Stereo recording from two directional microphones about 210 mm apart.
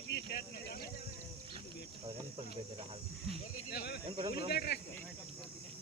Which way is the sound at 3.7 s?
50° left (ahead or behind).